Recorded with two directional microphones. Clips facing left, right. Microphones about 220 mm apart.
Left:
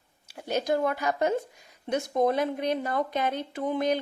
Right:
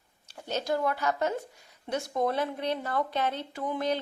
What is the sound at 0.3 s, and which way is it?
A woman's voice, 10° left (ahead or behind).